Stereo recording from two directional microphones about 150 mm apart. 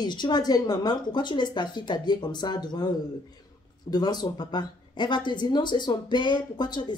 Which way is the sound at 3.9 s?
30° left (ahead or behind).